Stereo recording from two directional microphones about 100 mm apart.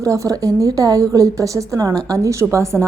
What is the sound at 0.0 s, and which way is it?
A woman's voice, 35° right (ahead or behind).